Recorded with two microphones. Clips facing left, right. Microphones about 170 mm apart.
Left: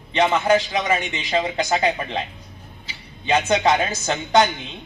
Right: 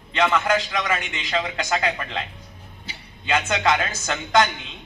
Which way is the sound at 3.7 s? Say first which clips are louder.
Left 3 dB; 30° left (ahead or behind).